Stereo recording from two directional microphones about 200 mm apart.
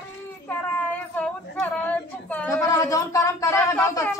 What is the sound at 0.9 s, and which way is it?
Female singing, 5° left (ahead or behind).